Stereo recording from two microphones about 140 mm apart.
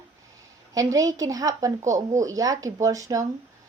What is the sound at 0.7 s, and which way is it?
Speech, 25° right (ahead or behind).